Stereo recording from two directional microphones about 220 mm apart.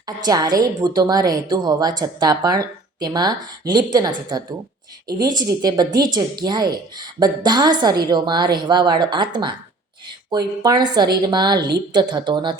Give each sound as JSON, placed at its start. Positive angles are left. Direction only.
{"t": 0.0, "sound": "a woman's voice", "side_deg": -15}